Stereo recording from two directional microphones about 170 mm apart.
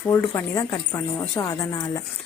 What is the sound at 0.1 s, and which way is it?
A woman's voice, 15° left (ahead or behind).